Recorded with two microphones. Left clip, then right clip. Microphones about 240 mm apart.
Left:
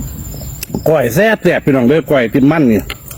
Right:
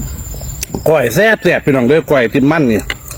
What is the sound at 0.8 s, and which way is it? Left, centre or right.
A man's voice, centre.